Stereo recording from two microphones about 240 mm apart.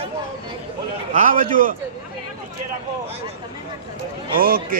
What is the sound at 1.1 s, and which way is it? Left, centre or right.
Speech, right.